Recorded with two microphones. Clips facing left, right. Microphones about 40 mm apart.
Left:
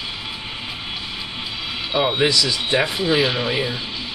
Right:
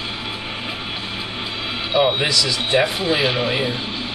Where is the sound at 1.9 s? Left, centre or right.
Centre.